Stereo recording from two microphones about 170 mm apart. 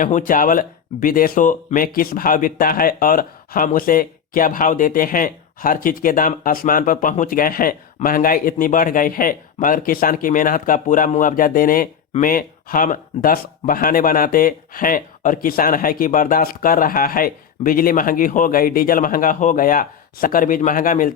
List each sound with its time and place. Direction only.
0.0 s speech: 55° left (ahead or behind)